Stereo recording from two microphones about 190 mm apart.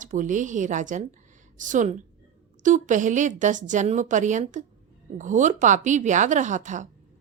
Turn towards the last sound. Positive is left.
turn(degrees=-40)  # may be behind; listen again after turning